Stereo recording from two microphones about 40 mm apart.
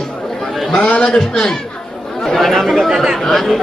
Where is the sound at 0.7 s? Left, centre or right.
Left.